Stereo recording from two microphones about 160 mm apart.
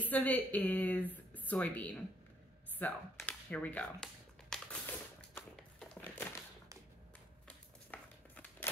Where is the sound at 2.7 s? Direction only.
10° left (ahead or behind).